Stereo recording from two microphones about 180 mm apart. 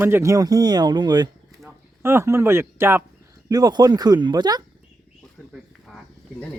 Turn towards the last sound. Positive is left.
turn(degrees=5)  # may be behind; listen again after turning